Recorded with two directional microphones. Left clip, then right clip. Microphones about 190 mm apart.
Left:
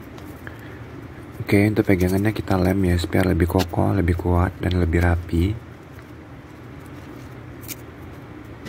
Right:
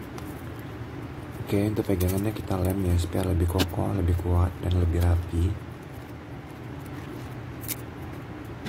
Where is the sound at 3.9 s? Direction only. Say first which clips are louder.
Left 8 dB; 30° left (ahead or behind).